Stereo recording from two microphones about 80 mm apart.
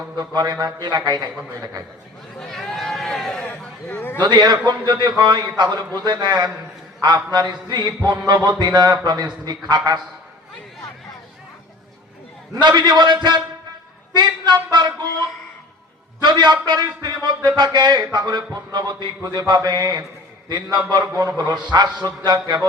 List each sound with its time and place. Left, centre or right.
0.2 s a man's voice: right
2.4 s run: centre
3.6 s a sound: centre
4.2 s a man's voice: right
12.5 s a man's voice: right
16.2 s a man's voice: right